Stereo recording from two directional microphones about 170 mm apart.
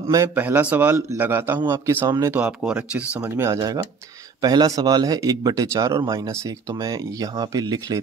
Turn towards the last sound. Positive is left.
turn(degrees=-20)  # may be behind; listen again after turning